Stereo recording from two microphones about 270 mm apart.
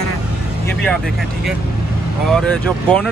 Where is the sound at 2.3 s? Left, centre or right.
Centre.